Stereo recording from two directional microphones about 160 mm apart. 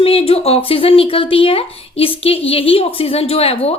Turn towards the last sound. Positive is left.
turn(degrees=40)  # may be behind; listen again after turning